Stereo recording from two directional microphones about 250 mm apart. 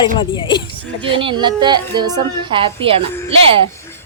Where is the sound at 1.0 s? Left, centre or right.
Right.